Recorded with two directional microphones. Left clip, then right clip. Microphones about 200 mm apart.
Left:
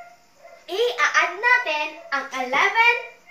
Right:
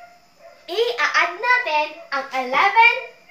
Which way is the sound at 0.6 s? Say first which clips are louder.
Right 1 dB; 15° right (ahead or behind).